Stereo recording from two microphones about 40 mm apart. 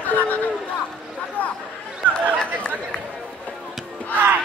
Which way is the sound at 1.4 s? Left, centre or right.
Left.